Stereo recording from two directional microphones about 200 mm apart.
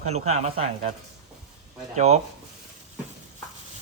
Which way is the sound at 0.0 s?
35° right (ahead or behind).